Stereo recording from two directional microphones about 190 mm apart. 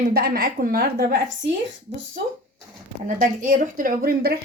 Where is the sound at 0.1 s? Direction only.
55° right (ahead or behind).